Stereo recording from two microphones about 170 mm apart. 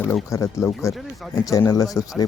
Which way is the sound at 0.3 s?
15° left (ahead or behind).